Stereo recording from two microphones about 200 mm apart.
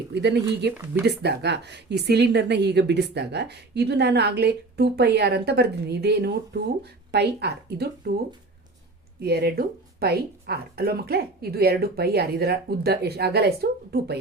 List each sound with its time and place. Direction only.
0.1 s speech: 55° right (ahead or behind)
9.2 s speech: 50° right (ahead or behind)